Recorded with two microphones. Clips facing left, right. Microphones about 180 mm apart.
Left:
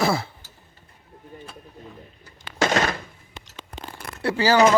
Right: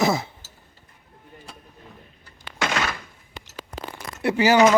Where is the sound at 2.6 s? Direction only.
40° left (ahead or behind).